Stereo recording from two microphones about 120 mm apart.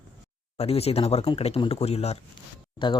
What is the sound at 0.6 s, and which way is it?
Speech, 55° left (ahead or behind).